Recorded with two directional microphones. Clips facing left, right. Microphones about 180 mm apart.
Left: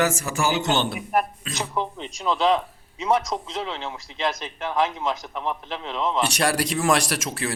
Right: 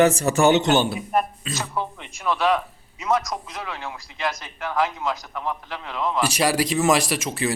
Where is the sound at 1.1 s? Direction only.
5° left (ahead or behind); by 6.2 s 25° left (ahead or behind).